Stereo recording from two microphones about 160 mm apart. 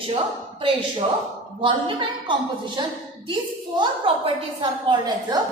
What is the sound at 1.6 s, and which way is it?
Speech, 30° right (ahead or behind).